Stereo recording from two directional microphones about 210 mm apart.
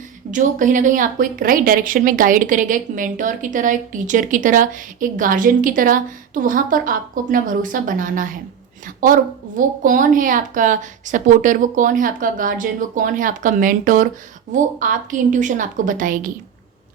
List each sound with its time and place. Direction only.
0.3 s a woman's voice: 35° right (ahead or behind)